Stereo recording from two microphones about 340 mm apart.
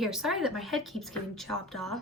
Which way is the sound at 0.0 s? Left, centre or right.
Centre.